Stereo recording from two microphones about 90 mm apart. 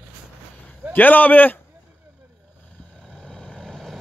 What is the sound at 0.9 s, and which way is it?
Speech, 20° left (ahead or behind).